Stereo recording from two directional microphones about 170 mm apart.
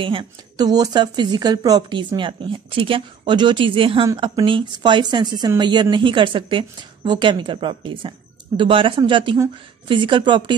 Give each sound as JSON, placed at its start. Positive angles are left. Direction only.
{"t": 0.0, "sound": "speech", "side_deg": -30}